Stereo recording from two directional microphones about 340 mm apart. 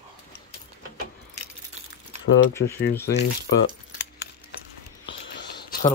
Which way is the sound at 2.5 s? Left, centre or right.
Centre.